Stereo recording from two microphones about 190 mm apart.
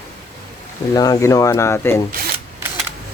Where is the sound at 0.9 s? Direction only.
20° left (ahead or behind).